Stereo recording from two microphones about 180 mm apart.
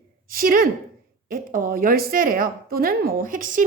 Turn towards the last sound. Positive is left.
turn(degrees=-50)  # may be behind; listen again after turning